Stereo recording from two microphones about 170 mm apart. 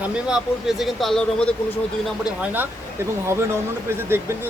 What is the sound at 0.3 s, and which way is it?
Speech, 5° right (ahead or behind).